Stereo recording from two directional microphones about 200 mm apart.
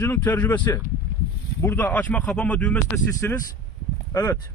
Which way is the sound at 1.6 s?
10° left (ahead or behind).